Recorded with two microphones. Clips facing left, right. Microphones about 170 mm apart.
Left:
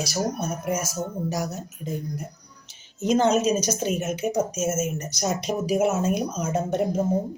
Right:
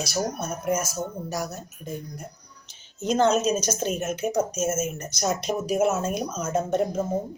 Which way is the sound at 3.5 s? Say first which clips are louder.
Left 2 dB; 15° left (ahead or behind).